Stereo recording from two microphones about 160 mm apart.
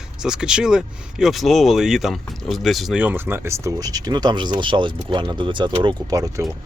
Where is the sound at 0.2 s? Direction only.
5° right (ahead or behind); by 6.4 s 20° right (ahead or behind).